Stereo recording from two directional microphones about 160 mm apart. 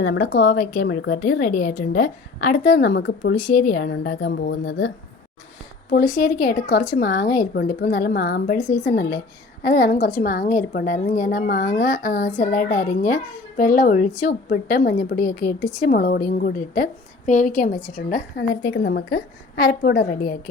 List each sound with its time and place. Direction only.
0.0 s a woman's voice: 75° left (ahead or behind); by 4.9 s 90° left
6.2 s a woman's voice: 70° left (ahead or behind)
8.5 s speech: 50° left (ahead or behind)
8.9 s a woman's voice: 65° left (ahead or behind)
9.6 s speech: 55° left (ahead or behind)
17.9 s speech: 65° left (ahead or behind)